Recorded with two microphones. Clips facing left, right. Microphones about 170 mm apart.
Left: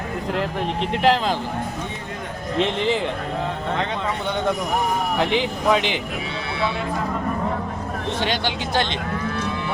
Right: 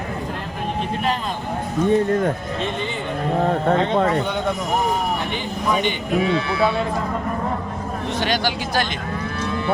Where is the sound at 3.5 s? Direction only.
50° right (ahead or behind).